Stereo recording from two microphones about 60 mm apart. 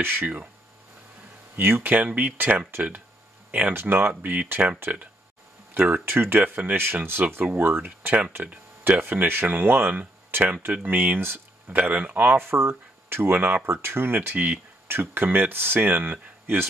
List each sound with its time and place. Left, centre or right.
0.0 s speech: right
1.6 s speech: right
6.0 s speech: right
11.0 s speech: right
14.9 s speech: right